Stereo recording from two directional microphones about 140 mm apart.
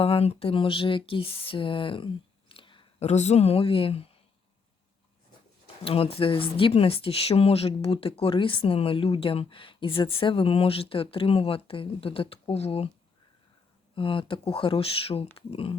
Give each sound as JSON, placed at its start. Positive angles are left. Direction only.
{"t": 0.0, "sound": "speech", "side_deg": 45}
{"t": 3.0, "sound": "speech", "side_deg": 55}
{"t": 5.8, "sound": "speech", "side_deg": 45}
{"t": 13.9, "sound": "speech", "side_deg": 40}